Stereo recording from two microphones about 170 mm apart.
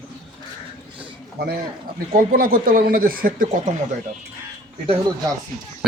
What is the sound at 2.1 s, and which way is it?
Speech, 55° right (ahead or behind).